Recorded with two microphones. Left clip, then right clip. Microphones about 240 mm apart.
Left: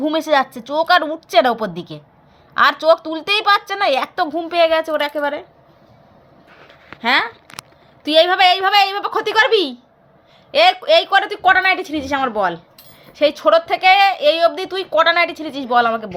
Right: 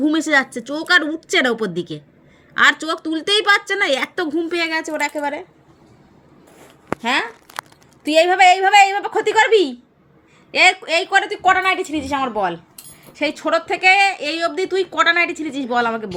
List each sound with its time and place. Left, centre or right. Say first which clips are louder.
0.0 s speech: left 1 dB; centre
7.0 s speech: left 4 dB; centre
10.5 s a woman's voice: left 3 dB; centre